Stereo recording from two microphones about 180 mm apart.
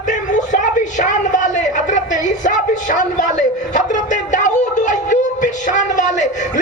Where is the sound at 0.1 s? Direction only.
45° left (ahead or behind).